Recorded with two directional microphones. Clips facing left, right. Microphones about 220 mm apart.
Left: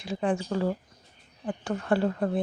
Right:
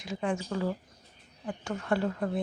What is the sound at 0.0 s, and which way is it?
Speech, 30° left (ahead or behind).